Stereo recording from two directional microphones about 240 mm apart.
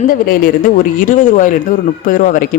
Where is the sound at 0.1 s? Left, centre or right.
Left.